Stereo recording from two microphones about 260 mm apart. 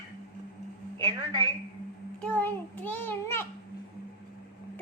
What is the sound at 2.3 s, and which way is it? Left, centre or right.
Child singing, centre.